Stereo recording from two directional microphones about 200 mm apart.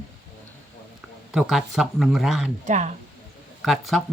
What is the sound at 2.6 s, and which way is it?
Speech, 35° right (ahead or behind).